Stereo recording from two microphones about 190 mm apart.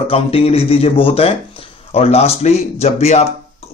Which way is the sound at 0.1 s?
30° left (ahead or behind).